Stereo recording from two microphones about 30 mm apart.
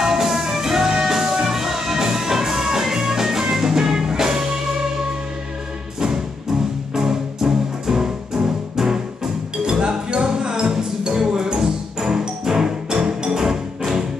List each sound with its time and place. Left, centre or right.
0.0 s music: centre
7.0 s music: right
9.6 s music: right